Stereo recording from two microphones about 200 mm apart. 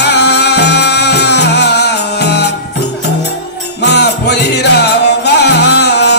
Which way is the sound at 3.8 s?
55° left (ahead or behind).